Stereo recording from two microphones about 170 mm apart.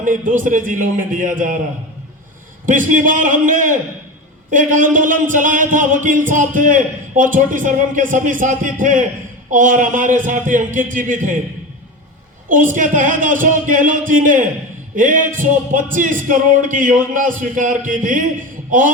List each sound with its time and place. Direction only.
0.0 s music: 50° right (ahead or behind)
2.6 s music: 50° right (ahead or behind)
12.5 s music: 50° right (ahead or behind)